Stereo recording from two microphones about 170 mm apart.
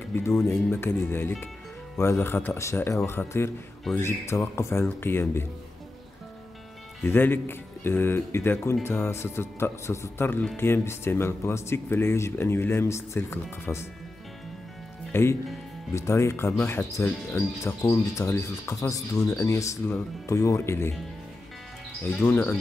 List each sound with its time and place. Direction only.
0.1 s speech: 15° left (ahead or behind)
7.0 s speech: 15° left (ahead or behind)
15.1 s speech: 15° left (ahead or behind)
22.0 s speech: 10° left (ahead or behind)